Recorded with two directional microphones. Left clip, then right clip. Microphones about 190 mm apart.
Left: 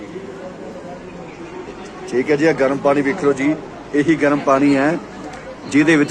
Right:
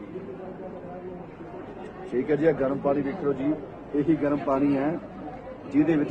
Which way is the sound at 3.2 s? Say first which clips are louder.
Left 10 dB; 25° left (ahead or behind).